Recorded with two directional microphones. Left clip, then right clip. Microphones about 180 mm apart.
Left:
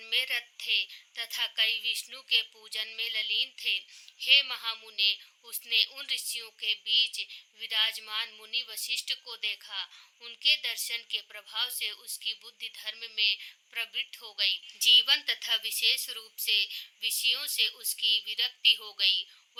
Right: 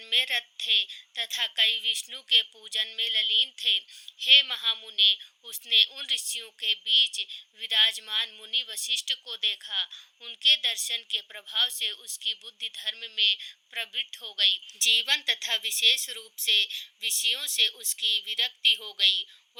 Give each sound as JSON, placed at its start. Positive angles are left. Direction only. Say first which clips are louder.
{"t": 0.0, "sound": "a woman's voice", "louder": "right 4 dB", "side_deg": -20}